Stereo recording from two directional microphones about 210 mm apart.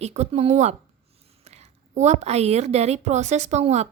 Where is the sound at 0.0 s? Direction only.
30° right (ahead or behind).